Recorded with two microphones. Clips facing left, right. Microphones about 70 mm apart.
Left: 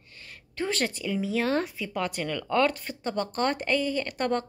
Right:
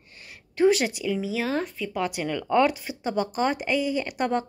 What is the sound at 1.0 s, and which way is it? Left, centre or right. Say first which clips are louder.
Speech: left 2 dB; centre.